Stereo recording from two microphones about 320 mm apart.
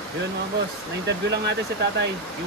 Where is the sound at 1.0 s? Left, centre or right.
Right.